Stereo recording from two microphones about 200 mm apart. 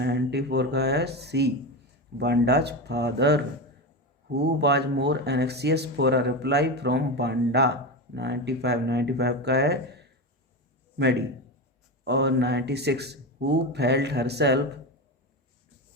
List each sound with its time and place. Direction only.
0.0 s a man's voice: 60° right (ahead or behind)